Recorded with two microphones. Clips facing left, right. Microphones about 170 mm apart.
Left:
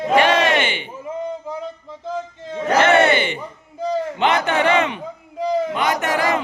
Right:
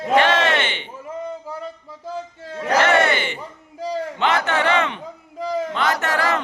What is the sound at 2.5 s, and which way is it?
Battle cry, 25° left (ahead or behind).